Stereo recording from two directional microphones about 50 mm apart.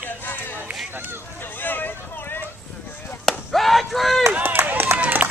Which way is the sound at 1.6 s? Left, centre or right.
Left.